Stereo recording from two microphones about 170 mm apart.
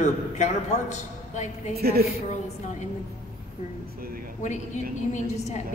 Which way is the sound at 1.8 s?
65° right (ahead or behind).